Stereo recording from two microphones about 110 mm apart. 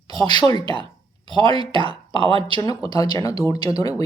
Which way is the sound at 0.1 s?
40° left (ahead or behind).